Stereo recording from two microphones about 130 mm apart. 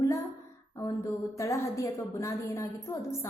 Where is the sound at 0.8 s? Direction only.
20° left (ahead or behind).